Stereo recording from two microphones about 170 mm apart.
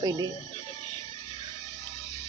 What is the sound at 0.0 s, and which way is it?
Speech, 25° right (ahead or behind).